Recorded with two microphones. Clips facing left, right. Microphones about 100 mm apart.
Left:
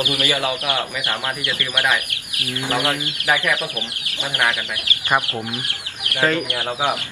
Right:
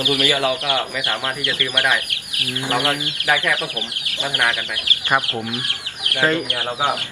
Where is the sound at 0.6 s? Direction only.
20° left (ahead or behind).